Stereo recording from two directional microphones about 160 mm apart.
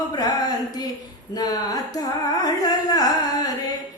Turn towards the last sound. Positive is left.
turn(degrees=25)  # may be behind; listen again after turning